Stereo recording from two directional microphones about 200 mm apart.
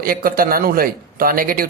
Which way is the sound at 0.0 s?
45° right (ahead or behind).